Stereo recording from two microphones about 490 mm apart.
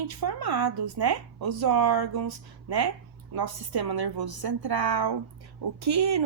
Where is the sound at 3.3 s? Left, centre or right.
Right.